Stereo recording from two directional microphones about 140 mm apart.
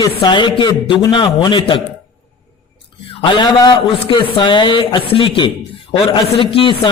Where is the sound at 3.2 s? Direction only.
35° left (ahead or behind).